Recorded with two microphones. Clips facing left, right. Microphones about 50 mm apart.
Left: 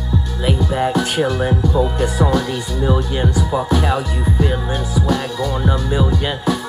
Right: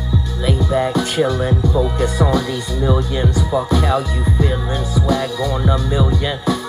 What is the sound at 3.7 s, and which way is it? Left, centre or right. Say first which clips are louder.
Speech: right 1 dB; left.